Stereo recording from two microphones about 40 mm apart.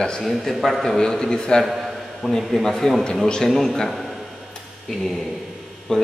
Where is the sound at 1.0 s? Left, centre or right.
Centre.